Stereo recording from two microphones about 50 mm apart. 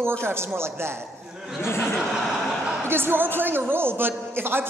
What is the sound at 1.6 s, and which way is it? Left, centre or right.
Speech, left.